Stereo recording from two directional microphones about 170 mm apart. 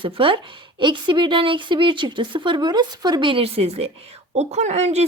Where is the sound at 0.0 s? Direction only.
30° right (ahead or behind).